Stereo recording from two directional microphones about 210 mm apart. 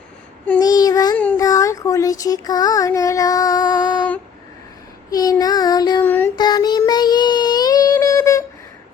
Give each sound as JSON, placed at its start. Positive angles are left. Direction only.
{"t": 0.4, "sound": "speech", "side_deg": 10}
{"t": 5.1, "sound": "child singing", "side_deg": 15}
{"t": 6.3, "sound": "child singing", "side_deg": 20}